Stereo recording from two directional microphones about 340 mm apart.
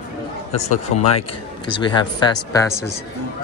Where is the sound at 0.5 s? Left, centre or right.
Centre.